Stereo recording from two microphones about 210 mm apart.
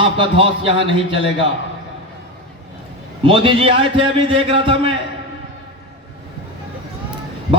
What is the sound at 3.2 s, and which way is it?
A man's voice, 25° right (ahead or behind).